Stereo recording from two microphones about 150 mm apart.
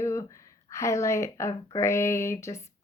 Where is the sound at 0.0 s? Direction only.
20° left (ahead or behind).